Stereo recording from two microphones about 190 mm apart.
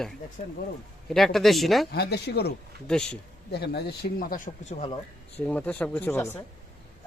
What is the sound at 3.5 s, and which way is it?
Speech, 60° left (ahead or behind).